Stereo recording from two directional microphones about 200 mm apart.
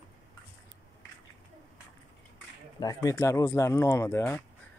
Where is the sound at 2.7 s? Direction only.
20° left (ahead or behind).